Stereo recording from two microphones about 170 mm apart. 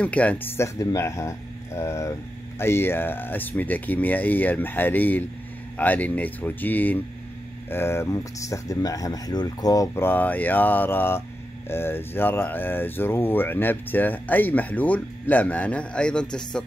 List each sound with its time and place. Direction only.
0.0 s speech: 10° left (ahead or behind)